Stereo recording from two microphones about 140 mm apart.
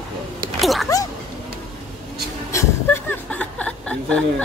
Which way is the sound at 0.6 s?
Centre (ahead or behind).